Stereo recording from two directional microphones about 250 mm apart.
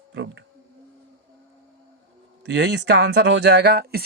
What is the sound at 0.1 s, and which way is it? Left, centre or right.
Speech, right.